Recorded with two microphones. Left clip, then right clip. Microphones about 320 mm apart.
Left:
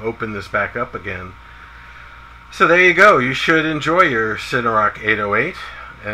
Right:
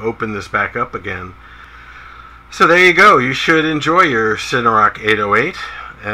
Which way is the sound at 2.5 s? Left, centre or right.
Centre.